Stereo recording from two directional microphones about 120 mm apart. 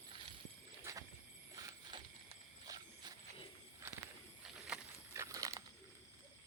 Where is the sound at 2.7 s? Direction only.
40° right (ahead or behind).